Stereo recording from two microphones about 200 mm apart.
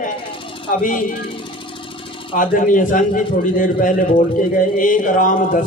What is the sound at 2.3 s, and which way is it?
A man's voice, 40° left (ahead or behind).